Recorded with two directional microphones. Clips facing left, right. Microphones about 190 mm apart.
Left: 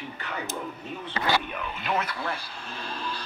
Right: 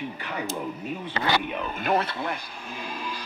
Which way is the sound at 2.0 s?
25° right (ahead or behind).